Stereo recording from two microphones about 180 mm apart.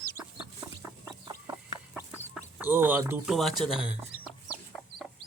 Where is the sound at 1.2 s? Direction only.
20° right (ahead or behind).